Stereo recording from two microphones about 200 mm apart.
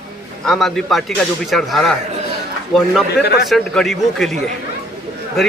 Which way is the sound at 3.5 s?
Centre (ahead or behind).